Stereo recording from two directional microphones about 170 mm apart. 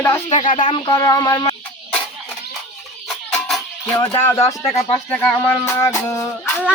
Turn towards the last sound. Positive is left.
turn(degrees=20)  # may be behind; listen again after turning